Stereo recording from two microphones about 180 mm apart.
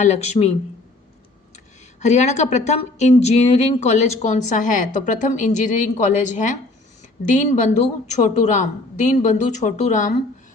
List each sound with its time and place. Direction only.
0.0 s a woman's voice: 40° left (ahead or behind)
2.0 s a woman's voice: 40° left (ahead or behind)